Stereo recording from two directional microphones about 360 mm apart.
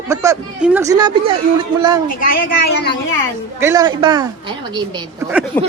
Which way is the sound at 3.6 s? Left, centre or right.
Centre.